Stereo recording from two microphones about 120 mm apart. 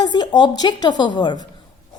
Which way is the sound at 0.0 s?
40° left (ahead or behind).